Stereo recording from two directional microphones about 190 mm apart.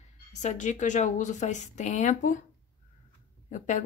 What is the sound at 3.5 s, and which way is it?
Speech, 40° left (ahead or behind).